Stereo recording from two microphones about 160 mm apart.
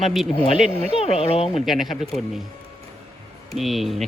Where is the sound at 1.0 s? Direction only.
40° left (ahead or behind).